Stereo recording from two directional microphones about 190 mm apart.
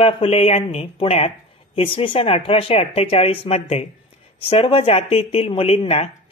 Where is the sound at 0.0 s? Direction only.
30° left (ahead or behind).